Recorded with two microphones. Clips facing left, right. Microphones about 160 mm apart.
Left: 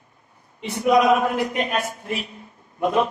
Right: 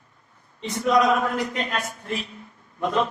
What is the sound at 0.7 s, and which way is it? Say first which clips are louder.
A man's voice: left 3 dB; 15° left (ahead or behind).